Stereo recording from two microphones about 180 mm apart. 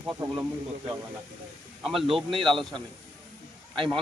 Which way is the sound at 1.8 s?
Centre (ahead or behind).